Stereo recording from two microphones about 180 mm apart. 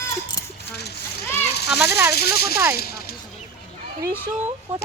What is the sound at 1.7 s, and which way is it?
Speech, 10° right (ahead or behind).